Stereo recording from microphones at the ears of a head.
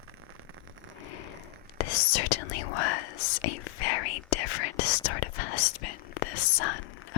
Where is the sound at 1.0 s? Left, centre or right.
Left.